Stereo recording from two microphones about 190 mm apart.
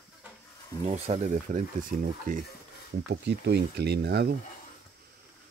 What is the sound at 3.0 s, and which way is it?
Speech, 60° right (ahead or behind).